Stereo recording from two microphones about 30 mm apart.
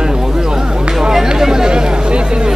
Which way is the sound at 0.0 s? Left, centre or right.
Right.